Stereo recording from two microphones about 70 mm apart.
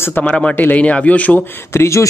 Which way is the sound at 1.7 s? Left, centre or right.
Left.